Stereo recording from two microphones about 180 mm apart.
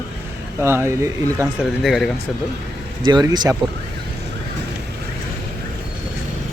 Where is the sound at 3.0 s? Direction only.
25° right (ahead or behind).